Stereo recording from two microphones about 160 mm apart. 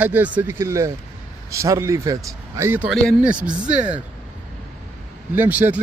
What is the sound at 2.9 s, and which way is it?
Speech, centre (ahead or behind).